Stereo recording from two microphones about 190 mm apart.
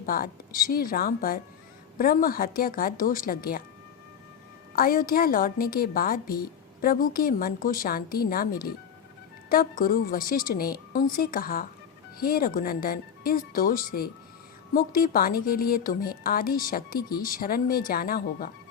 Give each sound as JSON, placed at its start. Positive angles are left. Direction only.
{"t": 0.0, "sound": "a woman's voice", "side_deg": 50}
{"t": 4.7, "sound": "a woman's voice", "side_deg": 50}
{"t": 9.5, "sound": "a woman's voice", "side_deg": 50}